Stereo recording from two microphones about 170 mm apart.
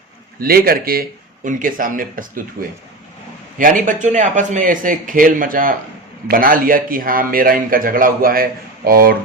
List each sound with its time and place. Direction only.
0.3 s a man's voice: 60° right (ahead or behind)